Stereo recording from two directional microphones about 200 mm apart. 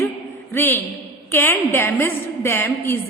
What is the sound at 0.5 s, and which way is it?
A woman's voice, 10° left (ahead or behind).